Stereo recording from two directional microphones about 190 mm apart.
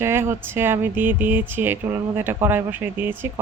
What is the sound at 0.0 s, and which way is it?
Speech, 10° right (ahead or behind).